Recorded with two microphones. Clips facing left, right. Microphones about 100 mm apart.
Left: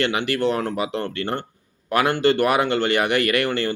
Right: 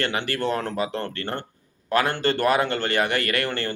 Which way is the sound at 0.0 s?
15° left (ahead or behind).